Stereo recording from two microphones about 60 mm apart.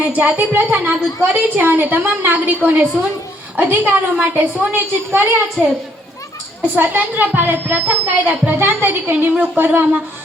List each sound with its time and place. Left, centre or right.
0.2 s a woman's voice: right
4.7 s a woman's voice: right
6.7 s a woman's voice: right